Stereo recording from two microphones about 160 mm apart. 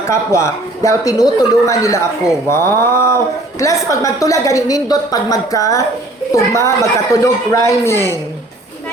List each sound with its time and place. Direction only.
0.1 s speech: 20° left (ahead or behind)